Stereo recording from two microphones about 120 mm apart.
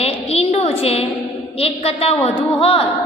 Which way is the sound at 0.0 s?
60° left (ahead or behind).